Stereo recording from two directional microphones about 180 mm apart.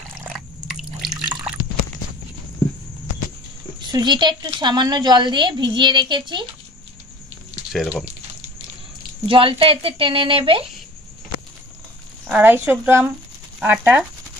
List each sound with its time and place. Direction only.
0.1 s drip: 5° right (ahead or behind)
3.9 s a woman's voice: 25° right (ahead or behind)
7.7 s speech: centre (ahead or behind)
9.3 s a woman's voice: 30° right (ahead or behind)
12.3 s speech: 10° right (ahead or behind)